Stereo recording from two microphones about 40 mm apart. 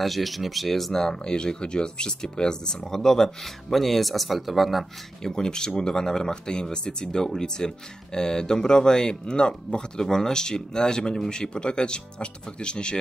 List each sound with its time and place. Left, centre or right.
0.0 s speech: centre
1.0 s speech: centre
5.2 s speech: centre